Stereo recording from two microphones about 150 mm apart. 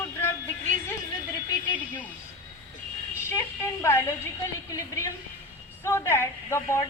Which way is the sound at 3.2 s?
15° left (ahead or behind).